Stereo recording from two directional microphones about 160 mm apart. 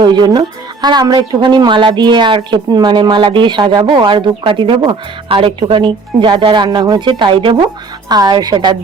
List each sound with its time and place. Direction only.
0.0 s speech: 25° right (ahead or behind)